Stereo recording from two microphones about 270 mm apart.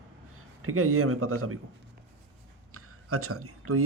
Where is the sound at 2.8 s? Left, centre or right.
Right.